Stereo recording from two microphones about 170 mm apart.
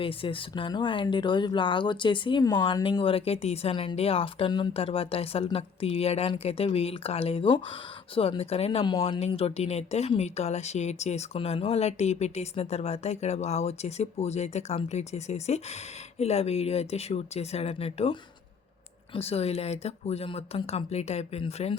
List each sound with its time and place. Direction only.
0.0 s speech: 30° left (ahead or behind)